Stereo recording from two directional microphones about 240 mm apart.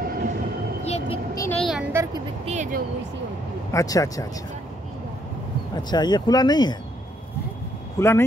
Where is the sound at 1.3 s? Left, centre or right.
Centre.